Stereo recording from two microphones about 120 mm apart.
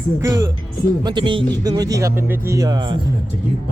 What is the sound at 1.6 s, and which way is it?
Speech, 30° right (ahead or behind).